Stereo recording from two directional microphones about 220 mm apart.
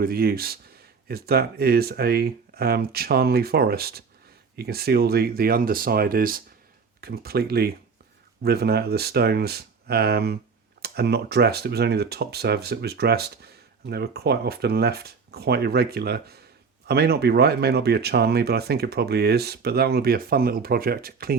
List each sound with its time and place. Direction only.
0.0 s speech: 40° right (ahead or behind)